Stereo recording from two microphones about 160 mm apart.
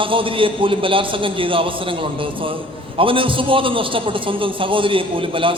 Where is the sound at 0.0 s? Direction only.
35° right (ahead or behind).